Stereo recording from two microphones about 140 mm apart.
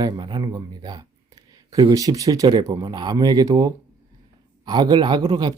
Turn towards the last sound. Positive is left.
turn(degrees=-30)  # may be behind; listen again after turning